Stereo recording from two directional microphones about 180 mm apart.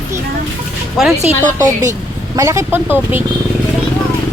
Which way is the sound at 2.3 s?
15° right (ahead or behind).